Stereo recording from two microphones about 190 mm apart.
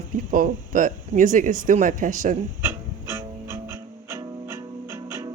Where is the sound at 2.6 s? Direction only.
15° right (ahead or behind).